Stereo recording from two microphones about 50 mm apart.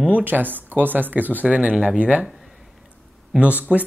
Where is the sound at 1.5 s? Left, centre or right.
Right.